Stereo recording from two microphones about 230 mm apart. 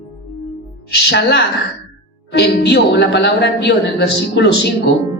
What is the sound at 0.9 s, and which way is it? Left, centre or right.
A woman's voice, left.